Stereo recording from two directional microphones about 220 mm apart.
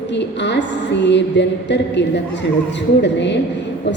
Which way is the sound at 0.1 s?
55° left (ahead or behind).